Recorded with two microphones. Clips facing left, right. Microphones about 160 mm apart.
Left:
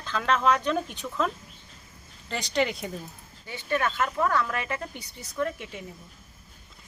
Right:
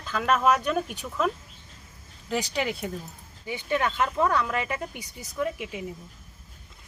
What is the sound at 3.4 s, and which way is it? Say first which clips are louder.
Speech: right 1 dB; 15° right (ahead or behind).